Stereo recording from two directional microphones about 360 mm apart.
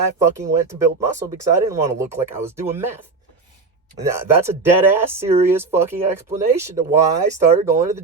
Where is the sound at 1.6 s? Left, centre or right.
Centre.